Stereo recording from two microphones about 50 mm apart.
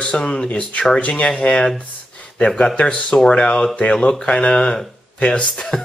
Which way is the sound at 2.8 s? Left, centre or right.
Left.